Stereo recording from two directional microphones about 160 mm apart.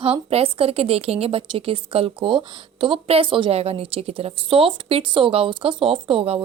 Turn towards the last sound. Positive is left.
turn(degrees=-35)  # may be behind; listen again after turning